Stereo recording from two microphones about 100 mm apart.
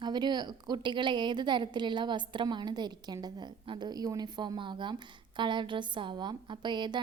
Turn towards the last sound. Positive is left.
turn(degrees=-50)  # may be behind; listen again after turning